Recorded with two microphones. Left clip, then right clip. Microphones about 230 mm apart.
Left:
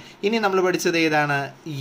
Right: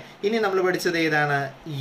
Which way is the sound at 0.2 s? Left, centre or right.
Left.